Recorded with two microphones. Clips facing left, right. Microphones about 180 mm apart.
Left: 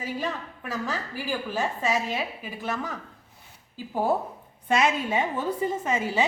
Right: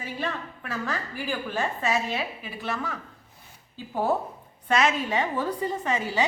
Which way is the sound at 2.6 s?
20° left (ahead or behind).